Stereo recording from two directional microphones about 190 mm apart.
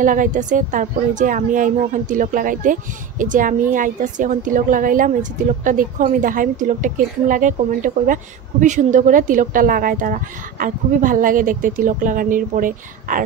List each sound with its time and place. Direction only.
0.0 s a woman's voice: 45° right (ahead or behind)